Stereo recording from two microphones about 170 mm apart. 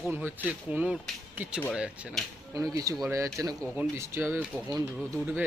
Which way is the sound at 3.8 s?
15° right (ahead or behind).